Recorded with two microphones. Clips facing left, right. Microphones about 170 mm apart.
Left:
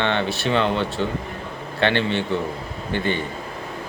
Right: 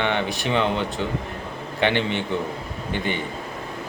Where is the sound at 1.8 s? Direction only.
15° right (ahead or behind).